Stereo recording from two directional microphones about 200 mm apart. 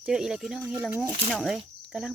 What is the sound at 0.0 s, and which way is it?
Speech, centre (ahead or behind).